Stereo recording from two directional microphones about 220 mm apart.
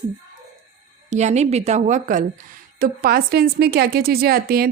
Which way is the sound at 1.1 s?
30° right (ahead or behind).